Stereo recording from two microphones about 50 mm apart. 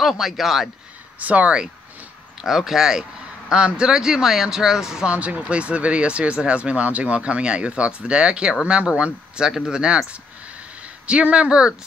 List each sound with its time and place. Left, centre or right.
0.0 s speech: centre
1.2 s speech: right
2.4 s a man's voice: centre
5.1 s a man's voice: right
11.1 s speech: right